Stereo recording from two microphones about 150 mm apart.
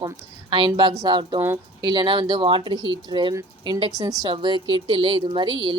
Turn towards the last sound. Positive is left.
turn(degrees=-30)  # may be behind; listen again after turning